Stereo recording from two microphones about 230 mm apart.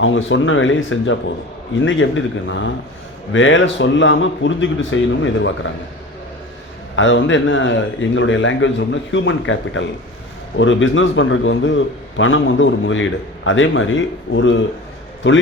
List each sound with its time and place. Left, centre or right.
0.0 s a man's voice: left
6.9 s a man's voice: left